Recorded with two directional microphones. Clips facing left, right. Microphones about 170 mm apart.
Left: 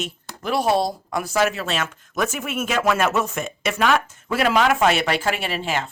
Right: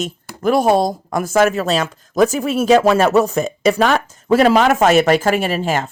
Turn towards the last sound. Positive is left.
turn(degrees=-45)  # may be behind; listen again after turning